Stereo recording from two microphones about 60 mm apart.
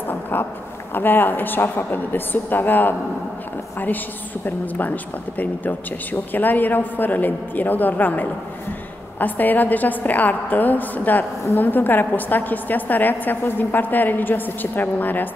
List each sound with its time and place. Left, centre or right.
0.1 s a sound: left
0.9 s a woman's voice: left
4.5 s a woman's voice: left